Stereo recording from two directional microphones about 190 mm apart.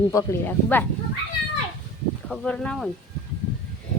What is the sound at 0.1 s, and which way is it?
Speech, 15° left (ahead or behind).